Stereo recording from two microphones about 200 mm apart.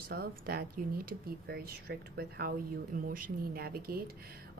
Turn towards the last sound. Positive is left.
turn(degrees=-50)  # may be behind; listen again after turning